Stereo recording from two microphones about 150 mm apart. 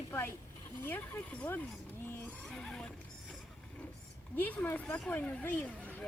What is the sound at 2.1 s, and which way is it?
Vehicle, 15° left (ahead or behind).